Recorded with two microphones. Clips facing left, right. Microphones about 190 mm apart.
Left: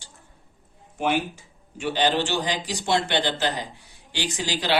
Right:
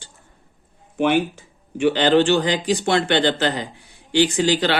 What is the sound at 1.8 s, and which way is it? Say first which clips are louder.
Speech: right 8 dB; 65° right (ahead or behind).